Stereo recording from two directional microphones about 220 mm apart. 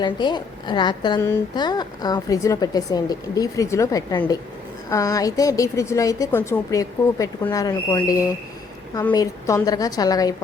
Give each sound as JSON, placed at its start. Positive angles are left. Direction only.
{"t": 0.0, "sound": "a woman's voice", "side_deg": 20}